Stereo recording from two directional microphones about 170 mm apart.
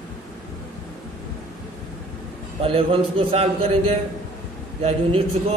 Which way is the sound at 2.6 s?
35° right (ahead or behind).